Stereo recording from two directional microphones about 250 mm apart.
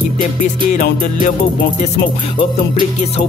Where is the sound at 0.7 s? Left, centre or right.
Left.